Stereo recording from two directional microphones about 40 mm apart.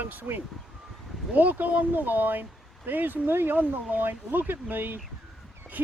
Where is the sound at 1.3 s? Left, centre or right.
Right.